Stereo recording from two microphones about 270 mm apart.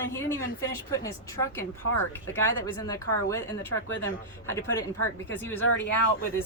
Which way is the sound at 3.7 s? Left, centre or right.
Left.